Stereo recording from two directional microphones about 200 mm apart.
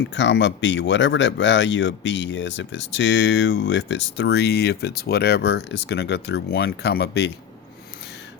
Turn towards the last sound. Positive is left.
turn(degrees=55)  # may be behind; listen again after turning